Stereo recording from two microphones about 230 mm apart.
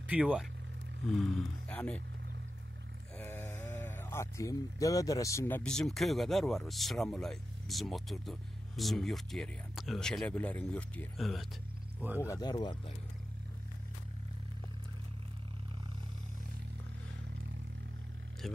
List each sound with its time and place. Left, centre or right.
0.1 s speech: centre
3.2 s speech: centre
12.2 s speech: centre
18.4 s speech: centre